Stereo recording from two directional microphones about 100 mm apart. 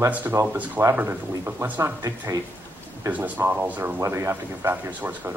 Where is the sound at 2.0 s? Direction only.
35° right (ahead or behind).